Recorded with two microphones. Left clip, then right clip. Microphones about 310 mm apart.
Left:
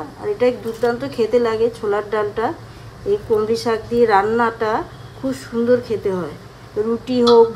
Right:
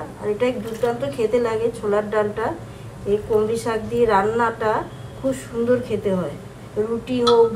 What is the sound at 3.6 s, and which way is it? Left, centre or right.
A woman's voice, centre.